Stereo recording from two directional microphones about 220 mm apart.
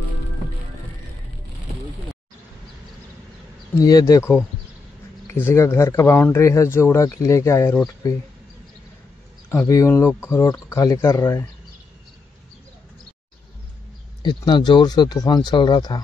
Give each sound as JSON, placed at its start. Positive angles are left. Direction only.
{"t": 3.7, "sound": "speech", "side_deg": 15}
{"t": 9.5, "sound": "speech", "side_deg": 15}
{"t": 14.2, "sound": "speech", "side_deg": 20}